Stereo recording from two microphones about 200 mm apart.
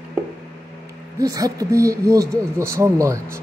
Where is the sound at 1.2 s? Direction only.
15° right (ahead or behind).